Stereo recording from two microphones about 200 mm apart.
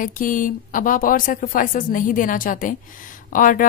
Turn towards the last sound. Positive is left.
turn(degrees=40)  # may be behind; listen again after turning